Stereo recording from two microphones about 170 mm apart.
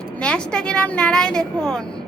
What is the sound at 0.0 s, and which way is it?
A woman's voice, 5° left (ahead or behind).